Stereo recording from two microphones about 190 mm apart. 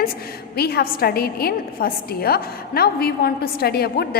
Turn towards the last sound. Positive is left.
turn(degrees=55)  # may be behind; listen again after turning